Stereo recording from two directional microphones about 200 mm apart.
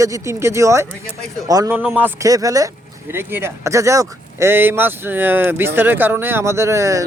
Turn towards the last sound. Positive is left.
turn(degrees=-15)  # may be behind; listen again after turning